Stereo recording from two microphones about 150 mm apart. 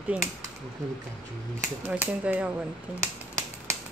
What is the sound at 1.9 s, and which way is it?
Speech, 10° right (ahead or behind).